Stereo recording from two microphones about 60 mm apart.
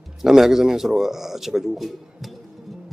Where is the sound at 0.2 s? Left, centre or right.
Centre.